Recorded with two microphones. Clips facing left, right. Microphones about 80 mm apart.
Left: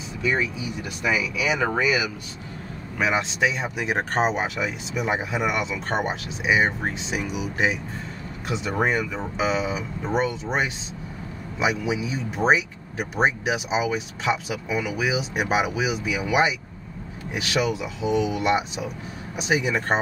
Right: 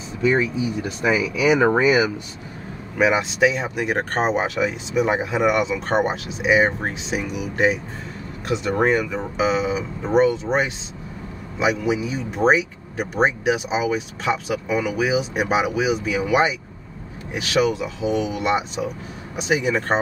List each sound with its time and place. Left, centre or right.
0.2 s speech: right
3.0 s speech: centre